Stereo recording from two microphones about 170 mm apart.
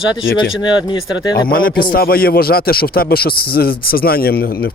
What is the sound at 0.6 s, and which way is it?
Speech, 25° left (ahead or behind).